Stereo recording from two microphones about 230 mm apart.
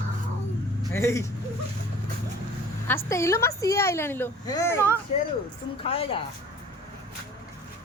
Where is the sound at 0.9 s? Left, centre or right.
Centre.